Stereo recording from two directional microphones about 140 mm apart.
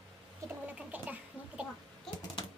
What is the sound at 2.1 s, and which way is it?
Typing, centre (ahead or behind).